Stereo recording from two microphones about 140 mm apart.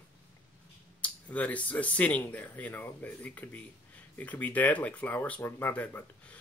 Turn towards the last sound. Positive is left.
turn(degrees=10)  # may be behind; listen again after turning